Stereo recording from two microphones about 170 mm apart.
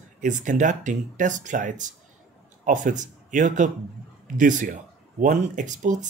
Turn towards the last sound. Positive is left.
turn(degrees=-45)  # may be behind; listen again after turning